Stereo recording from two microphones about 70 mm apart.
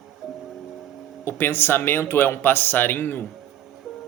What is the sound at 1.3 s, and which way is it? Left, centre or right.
Speech, left.